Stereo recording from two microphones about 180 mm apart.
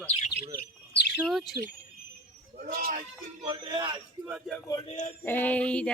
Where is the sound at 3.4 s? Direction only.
25° right (ahead or behind).